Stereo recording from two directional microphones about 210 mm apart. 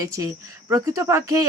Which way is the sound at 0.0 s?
15° right (ahead or behind).